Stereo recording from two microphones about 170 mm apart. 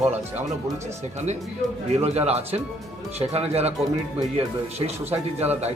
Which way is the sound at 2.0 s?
35° right (ahead or behind).